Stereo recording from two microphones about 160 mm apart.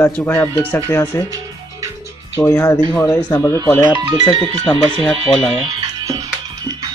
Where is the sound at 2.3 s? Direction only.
20° left (ahead or behind).